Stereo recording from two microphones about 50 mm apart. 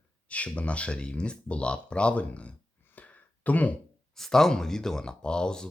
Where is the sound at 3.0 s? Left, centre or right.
Left.